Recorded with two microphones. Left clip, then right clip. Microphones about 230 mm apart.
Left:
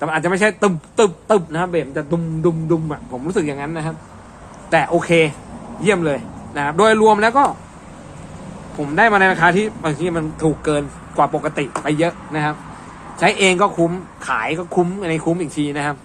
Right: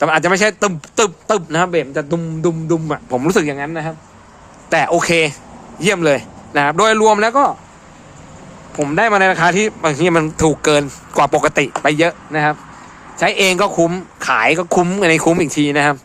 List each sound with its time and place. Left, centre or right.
0.0 s a man's voice: right
8.8 s a man's voice: right